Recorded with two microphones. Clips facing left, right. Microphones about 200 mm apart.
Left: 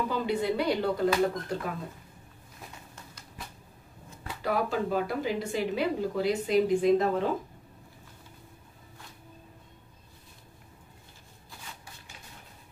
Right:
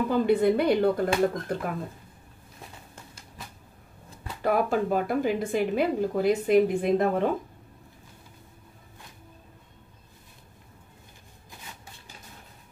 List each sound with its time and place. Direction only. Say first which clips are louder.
0.1 s speech: right 7 dB; 55° right (ahead or behind)
4.4 s speech: right 4 dB; 55° right (ahead or behind)